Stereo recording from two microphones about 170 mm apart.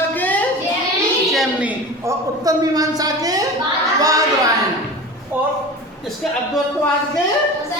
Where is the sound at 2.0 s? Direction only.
20° right (ahead or behind).